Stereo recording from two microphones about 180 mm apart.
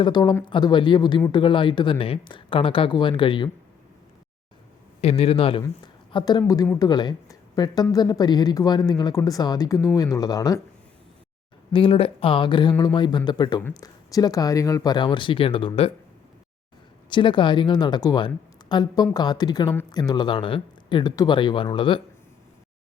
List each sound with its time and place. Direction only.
0.0 s a woman's voice: 25° left (ahead or behind)
4.9 s a man's voice: 35° left (ahead or behind)
11.7 s a woman's voice: 30° left (ahead or behind)
17.1 s a woman's voice: 25° left (ahead or behind)